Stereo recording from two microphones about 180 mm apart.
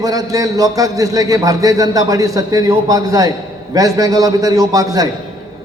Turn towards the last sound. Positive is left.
turn(degrees=-20)  # may be behind; listen again after turning